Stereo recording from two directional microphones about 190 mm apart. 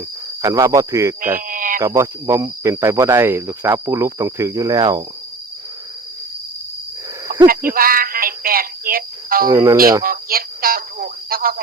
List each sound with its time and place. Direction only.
0.4 s speech: 20° right (ahead or behind)
1.4 s cricket: 45° right (ahead or behind)
1.8 s speech: 15° right (ahead or behind)
7.3 s a sound: 50° right (ahead or behind)
7.7 s speech: 50° right (ahead or behind)
9.5 s speech: 15° right (ahead or behind)
10.0 s speech: 50° right (ahead or behind)